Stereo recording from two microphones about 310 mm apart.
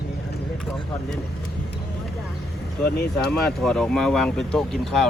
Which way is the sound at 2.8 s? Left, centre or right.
Left.